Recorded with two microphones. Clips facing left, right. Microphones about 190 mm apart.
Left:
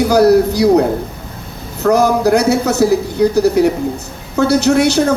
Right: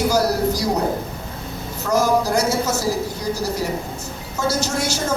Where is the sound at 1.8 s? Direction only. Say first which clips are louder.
Left 7 dB; 65° left (ahead or behind).